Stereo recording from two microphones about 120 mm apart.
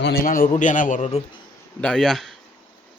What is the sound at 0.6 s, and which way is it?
Speech, 90° left.